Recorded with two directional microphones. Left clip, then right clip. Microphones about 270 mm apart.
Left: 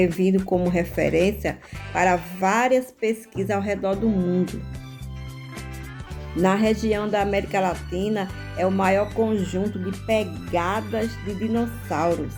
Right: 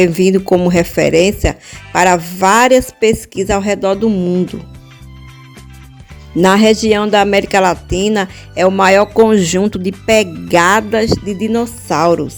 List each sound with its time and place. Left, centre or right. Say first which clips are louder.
0.0 s speech: right 10 dB; right
6.4 s speech: right 12 dB; right